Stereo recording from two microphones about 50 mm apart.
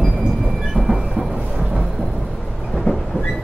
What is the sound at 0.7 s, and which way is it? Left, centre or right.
Train, centre.